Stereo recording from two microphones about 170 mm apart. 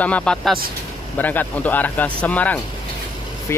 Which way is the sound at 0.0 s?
5° left (ahead or behind).